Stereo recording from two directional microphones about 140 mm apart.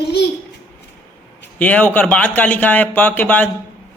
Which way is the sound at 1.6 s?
10° left (ahead or behind).